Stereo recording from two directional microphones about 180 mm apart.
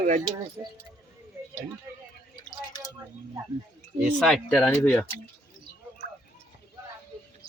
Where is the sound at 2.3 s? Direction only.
20° left (ahead or behind).